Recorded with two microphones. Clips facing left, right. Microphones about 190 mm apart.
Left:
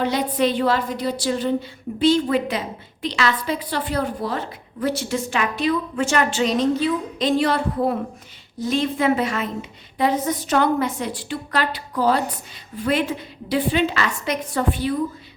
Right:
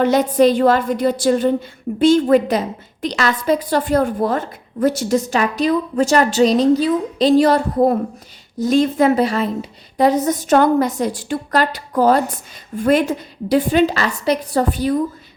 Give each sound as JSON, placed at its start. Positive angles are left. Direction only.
{"t": 0.0, "sound": "a woman's voice", "side_deg": -45}